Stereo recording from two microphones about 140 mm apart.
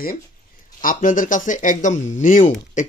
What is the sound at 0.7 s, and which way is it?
Speech, 70° left (ahead or behind).